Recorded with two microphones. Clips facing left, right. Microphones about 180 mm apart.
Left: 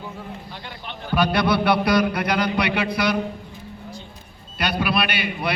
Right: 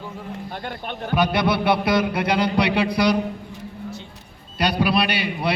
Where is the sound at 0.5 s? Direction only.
50° right (ahead or behind).